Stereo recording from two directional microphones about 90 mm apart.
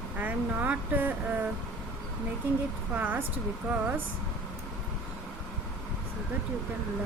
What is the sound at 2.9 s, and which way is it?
Speech, 20° right (ahead or behind).